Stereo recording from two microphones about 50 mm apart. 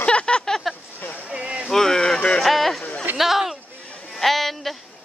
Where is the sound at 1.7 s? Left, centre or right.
Centre.